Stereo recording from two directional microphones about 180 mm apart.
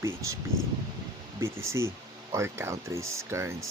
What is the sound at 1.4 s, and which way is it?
Speech, 15° right (ahead or behind).